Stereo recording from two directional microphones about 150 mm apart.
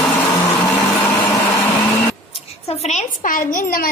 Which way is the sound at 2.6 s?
45° left (ahead or behind).